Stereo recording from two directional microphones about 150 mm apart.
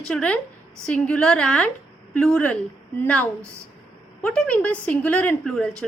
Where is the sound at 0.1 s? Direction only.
5° left (ahead or behind).